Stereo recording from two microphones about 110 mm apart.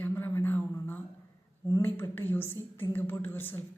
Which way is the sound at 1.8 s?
15° left (ahead or behind).